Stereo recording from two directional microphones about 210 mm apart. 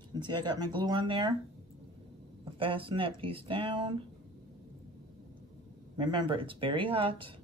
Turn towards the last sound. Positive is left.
turn(degrees=-25)  # may be behind; listen again after turning